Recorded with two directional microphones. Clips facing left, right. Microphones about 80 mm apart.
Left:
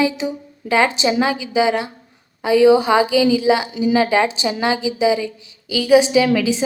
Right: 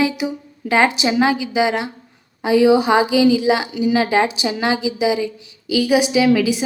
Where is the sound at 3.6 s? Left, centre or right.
Left.